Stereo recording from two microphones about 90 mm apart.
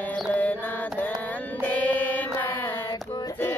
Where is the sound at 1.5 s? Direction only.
20° left (ahead or behind).